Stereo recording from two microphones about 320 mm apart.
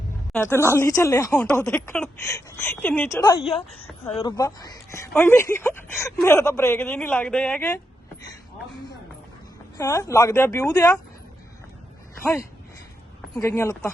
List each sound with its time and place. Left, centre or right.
0.7 s speech: centre
3.8 s speech: centre
9.7 s speech: centre
13.3 s speech: centre